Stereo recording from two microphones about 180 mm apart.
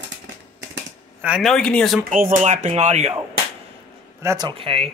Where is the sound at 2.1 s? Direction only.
45° right (ahead or behind).